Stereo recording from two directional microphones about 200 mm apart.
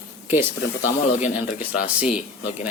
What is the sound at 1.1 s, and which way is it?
Speech, 40° left (ahead or behind).